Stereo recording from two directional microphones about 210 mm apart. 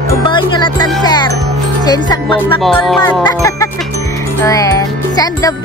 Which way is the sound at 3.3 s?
15° left (ahead or behind).